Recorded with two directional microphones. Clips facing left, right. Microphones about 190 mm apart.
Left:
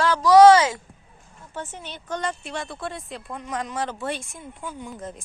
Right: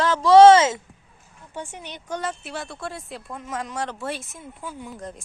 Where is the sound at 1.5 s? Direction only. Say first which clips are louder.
Even; 15° right (ahead or behind).